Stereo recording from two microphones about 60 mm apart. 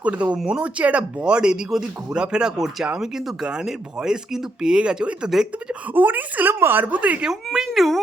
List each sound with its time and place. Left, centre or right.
0.0 s a woman's voice: right
5.9 s a woman's voice: right
6.5 s a woman's voice: right
7.3 s speech: centre